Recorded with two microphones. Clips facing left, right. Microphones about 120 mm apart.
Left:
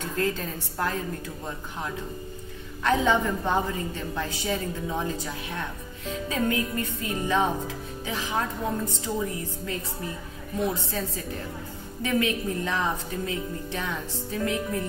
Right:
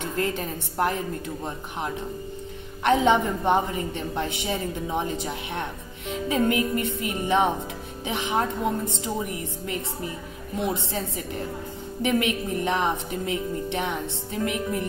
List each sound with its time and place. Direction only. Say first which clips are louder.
0.2 s a woman's voice: even; 20° right (ahead or behind)
2.8 s a woman's voice: right 3 dB; 20° right (ahead or behind)